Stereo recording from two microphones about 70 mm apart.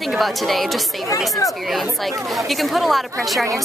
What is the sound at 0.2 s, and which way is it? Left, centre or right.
Speech, centre.